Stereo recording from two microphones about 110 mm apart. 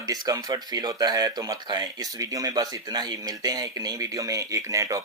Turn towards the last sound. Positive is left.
turn(degrees=-30)  # may be behind; listen again after turning